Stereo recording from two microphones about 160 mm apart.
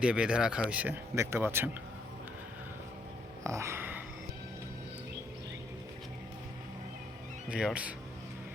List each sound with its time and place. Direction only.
0.0 s speech: 5° right (ahead or behind)
3.4 s a sound: 20° right (ahead or behind)
7.5 s speech: 5° right (ahead or behind)